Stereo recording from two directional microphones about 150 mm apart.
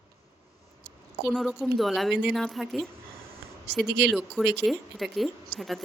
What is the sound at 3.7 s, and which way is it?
Speech, 90° right.